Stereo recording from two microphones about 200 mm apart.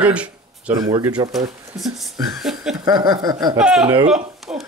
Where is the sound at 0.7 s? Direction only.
25° right (ahead or behind).